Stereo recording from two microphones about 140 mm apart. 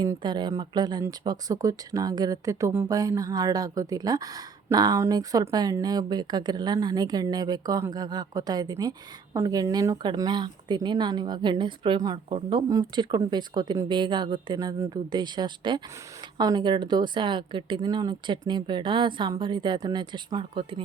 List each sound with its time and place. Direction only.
0.0 s a woman's voice: 30° right (ahead or behind)